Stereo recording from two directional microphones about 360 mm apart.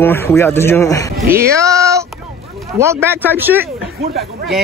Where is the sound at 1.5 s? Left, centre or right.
Centre.